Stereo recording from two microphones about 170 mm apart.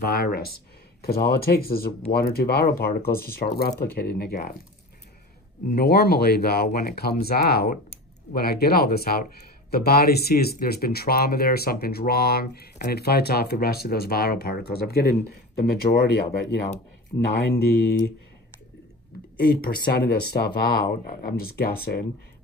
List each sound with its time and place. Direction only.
0.0 s speech: 65° left (ahead or behind)
5.7 s speech: 65° left (ahead or behind)
17.1 s speech: 25° left (ahead or behind)
17.6 s speech: 70° left (ahead or behind)
19.4 s speech: 70° left (ahead or behind)